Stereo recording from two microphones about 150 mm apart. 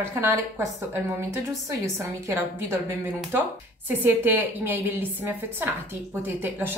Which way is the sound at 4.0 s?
15° right (ahead or behind).